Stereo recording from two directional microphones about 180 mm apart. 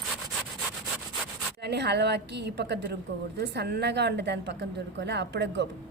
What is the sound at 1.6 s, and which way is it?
A woman's voice, 70° right (ahead or behind).